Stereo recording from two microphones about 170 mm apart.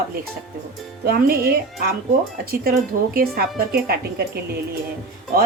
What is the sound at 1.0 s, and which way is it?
Speech, 65° right (ahead or behind).